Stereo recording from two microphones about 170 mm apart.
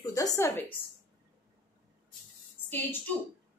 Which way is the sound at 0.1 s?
20° left (ahead or behind).